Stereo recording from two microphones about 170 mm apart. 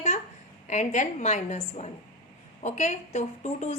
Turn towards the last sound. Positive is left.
turn(degrees=40)  # may be behind; listen again after turning